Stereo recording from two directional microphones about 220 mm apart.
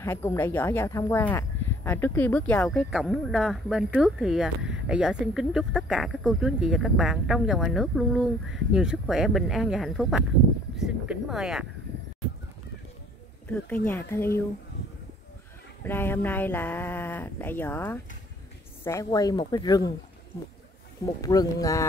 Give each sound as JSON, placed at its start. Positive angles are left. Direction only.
{"t": 0.0, "sound": "speech", "side_deg": 10}
{"t": 13.8, "sound": "speech", "side_deg": 10}
{"t": 15.8, "sound": "speech", "side_deg": 10}
{"t": 21.0, "sound": "speech", "side_deg": 15}